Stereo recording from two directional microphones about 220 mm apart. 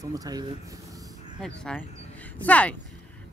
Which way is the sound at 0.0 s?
15° right (ahead or behind).